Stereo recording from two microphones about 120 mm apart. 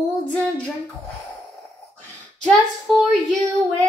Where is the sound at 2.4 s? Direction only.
Centre (ahead or behind).